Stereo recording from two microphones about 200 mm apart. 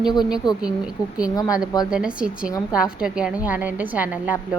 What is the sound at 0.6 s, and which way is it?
A woman's voice, 5° right (ahead or behind).